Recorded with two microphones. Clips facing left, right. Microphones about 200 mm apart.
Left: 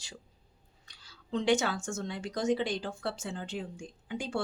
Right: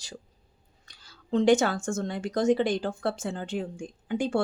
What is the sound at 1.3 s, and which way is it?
Speech, 50° right (ahead or behind).